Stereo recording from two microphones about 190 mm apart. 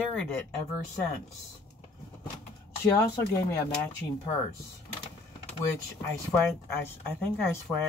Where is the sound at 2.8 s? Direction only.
20° left (ahead or behind).